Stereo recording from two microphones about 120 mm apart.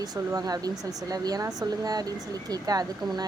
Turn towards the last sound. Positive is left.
turn(degrees=-30)  # may be behind; listen again after turning